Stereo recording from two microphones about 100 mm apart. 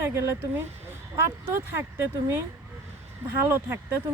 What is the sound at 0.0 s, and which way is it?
Speech, 25° right (ahead or behind).